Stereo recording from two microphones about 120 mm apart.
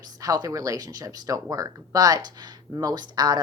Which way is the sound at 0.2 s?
30° right (ahead or behind).